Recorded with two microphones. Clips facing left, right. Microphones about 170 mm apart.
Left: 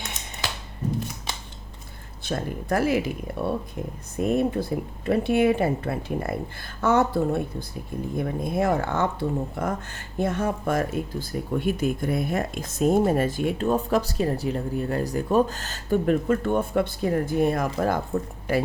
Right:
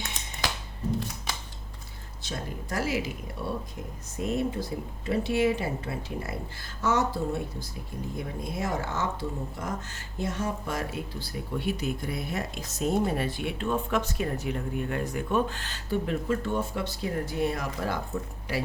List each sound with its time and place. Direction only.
2.2 s speech: 55° left (ahead or behind)